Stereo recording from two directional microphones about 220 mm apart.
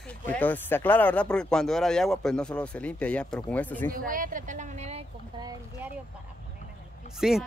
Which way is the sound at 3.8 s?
40° right (ahead or behind).